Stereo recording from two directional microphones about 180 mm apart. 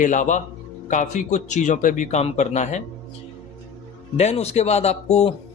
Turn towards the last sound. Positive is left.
turn(degrees=35)  # may be behind; listen again after turning